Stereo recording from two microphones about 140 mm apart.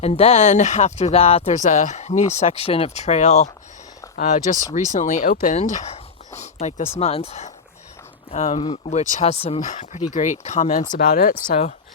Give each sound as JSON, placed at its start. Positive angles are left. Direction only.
{"t": 0.0, "sound": "speech", "side_deg": 50}
{"t": 5.5, "sound": "a sound", "side_deg": 60}
{"t": 7.0, "sound": "speech", "side_deg": 45}
{"t": 9.6, "sound": "speech", "side_deg": 65}
{"t": 10.9, "sound": "speech", "side_deg": 85}